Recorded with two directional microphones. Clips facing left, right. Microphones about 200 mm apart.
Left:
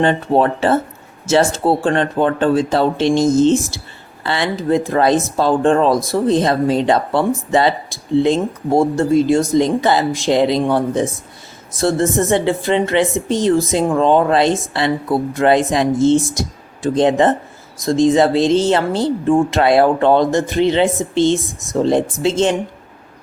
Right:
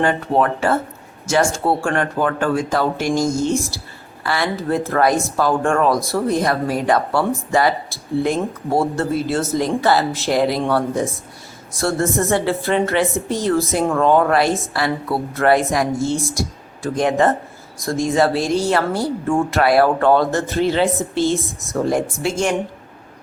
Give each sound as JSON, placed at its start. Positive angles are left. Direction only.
{"t": 0.0, "sound": "speech", "side_deg": 25}
{"t": 3.3, "sound": "speech", "side_deg": -15}
{"t": 4.2, "sound": "speech", "side_deg": 25}